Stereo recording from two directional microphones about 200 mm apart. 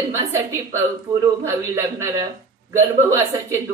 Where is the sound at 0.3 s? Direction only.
15° right (ahead or behind).